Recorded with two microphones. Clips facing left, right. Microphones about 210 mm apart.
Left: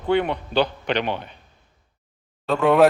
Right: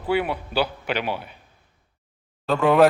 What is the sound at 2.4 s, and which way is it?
Speech, centre (ahead or behind).